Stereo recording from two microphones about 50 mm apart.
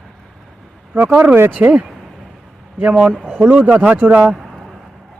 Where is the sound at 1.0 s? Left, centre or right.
Right.